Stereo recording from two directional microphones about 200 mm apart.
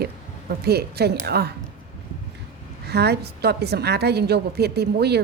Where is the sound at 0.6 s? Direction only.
55° right (ahead or behind).